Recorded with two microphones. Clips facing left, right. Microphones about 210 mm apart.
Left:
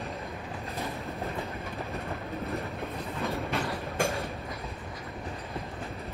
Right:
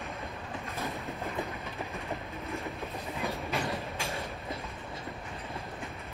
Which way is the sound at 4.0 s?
50° left (ahead or behind).